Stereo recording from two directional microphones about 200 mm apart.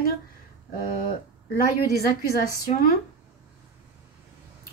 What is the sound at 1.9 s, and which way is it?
A woman's voice, 50° left (ahead or behind).